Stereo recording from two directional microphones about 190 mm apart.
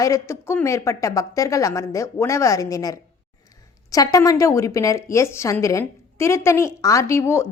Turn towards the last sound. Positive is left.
turn(degrees=15)  # may be behind; listen again after turning